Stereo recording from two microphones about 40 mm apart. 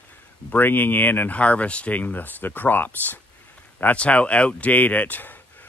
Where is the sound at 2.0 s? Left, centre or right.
Left.